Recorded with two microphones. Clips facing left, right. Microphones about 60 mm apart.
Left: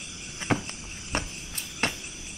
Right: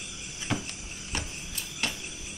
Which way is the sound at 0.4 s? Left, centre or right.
Left.